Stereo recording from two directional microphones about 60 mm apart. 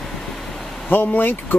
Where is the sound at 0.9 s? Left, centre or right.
Left.